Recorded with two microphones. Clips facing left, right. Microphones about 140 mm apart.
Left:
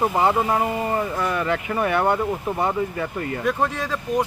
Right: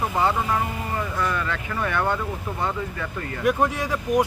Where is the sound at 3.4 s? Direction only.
15° right (ahead or behind).